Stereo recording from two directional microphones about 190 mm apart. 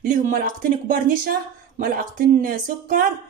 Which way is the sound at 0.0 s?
45° right (ahead or behind).